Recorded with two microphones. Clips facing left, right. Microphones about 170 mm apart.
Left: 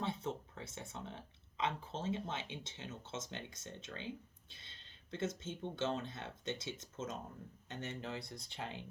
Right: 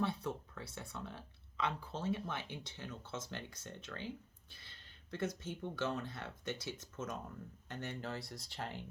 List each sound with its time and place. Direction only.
0.0 s speech: 20° left (ahead or behind)